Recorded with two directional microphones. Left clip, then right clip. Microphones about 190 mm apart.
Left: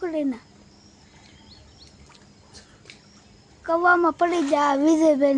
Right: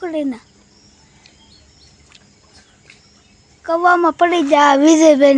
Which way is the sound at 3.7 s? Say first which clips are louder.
Right 6 dB; 50° right (ahead or behind).